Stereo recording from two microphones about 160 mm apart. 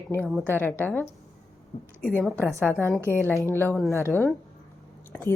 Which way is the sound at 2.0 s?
5° left (ahead or behind).